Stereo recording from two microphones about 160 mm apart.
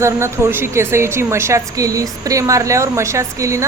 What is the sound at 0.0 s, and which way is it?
Speech, 15° right (ahead or behind).